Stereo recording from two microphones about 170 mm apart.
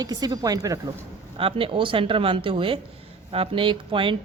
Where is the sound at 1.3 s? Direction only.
30° right (ahead or behind).